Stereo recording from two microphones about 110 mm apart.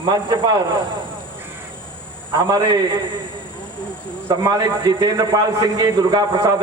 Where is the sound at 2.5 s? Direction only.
35° right (ahead or behind).